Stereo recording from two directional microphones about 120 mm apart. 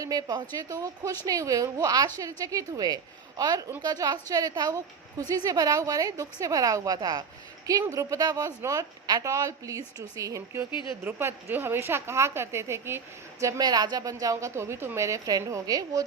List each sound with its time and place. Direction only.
0.0 s a woman's voice: 30° right (ahead or behind)
10.7 s speech: 45° left (ahead or behind)
11.0 s a woman's voice: 20° right (ahead or behind)
13.4 s a woman's voice: 35° right (ahead or behind)